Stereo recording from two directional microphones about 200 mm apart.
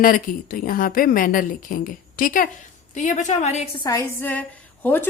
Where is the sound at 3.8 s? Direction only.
15° left (ahead or behind).